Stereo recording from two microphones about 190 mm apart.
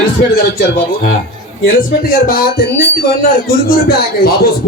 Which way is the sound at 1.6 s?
50° left (ahead or behind).